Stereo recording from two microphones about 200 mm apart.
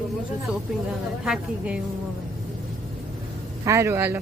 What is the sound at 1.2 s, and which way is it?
Speech, 5° right (ahead or behind).